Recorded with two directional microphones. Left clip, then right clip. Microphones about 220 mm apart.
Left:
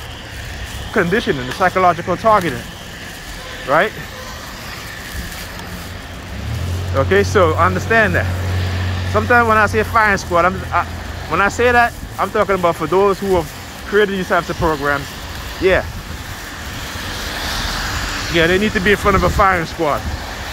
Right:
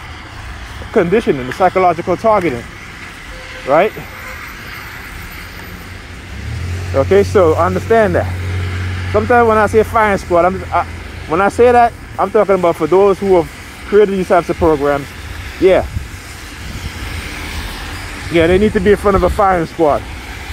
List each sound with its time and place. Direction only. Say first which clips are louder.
0.9 s speech: right 4 dB; 35° right (ahead or behind)
3.6 s speech: right 3 dB; 35° right (ahead or behind)
7.0 s speech: right 3 dB; 40° right (ahead or behind)
18.3 s speech: right 4 dB; 35° right (ahead or behind)